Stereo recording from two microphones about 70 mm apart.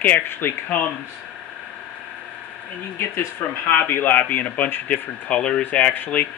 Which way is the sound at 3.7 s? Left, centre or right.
Left.